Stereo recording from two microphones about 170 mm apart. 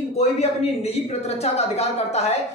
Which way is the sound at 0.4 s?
40° left (ahead or behind).